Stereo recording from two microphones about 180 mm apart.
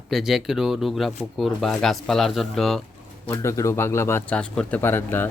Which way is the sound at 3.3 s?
15° left (ahead or behind).